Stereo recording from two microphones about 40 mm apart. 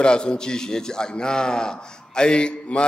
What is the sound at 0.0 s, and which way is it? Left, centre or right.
A man's voice, left.